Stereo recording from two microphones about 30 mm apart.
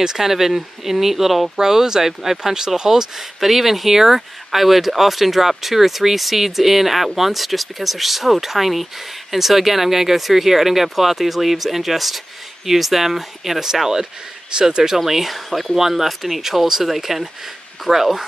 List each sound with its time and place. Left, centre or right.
0.0 s speech: centre
1.6 s speech: centre
3.2 s speech: centre
14.5 s speech: right
15.0 s speech: centre